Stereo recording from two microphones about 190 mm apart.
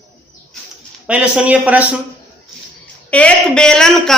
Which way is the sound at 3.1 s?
5° left (ahead or behind).